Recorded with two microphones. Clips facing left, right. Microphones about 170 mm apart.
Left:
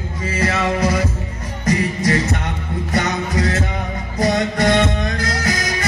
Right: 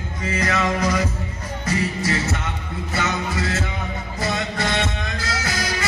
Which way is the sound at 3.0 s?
40° left (ahead or behind).